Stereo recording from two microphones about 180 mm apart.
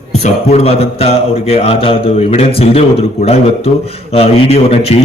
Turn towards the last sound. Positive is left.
turn(degrees=35)  # may be behind; listen again after turning